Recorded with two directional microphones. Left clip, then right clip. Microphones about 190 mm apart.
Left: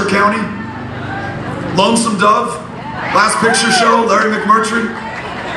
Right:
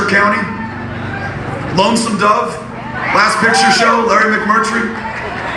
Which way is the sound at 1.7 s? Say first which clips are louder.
Left 1 dB; 25° right (ahead or behind).